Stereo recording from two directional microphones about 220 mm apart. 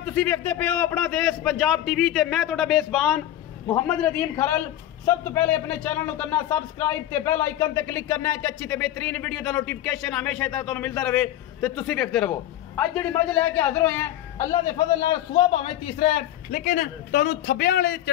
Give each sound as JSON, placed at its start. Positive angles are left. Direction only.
{"t": 0.0, "sound": "a man's voice", "side_deg": 10}